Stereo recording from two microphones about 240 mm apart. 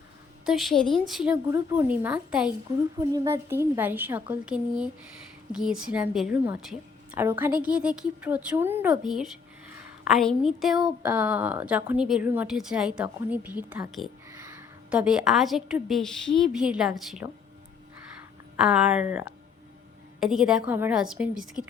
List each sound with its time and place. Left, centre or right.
0.4 s a woman's voice: centre
18.5 s a woman's voice: centre